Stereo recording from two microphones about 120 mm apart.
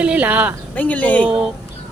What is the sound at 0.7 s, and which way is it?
Speech, 10° left (ahead or behind).